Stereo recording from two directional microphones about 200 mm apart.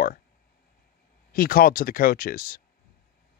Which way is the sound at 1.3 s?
50° left (ahead or behind).